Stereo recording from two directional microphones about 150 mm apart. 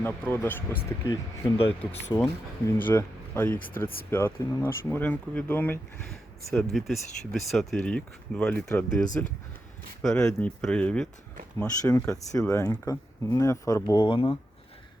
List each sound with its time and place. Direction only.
0.0 s speech: 15° left (ahead or behind)
10.2 s speech: 5° left (ahead or behind)
11.9 s speech: 20° left (ahead or behind)